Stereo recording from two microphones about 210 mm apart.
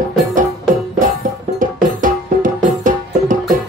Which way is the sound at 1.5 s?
40° right (ahead or behind).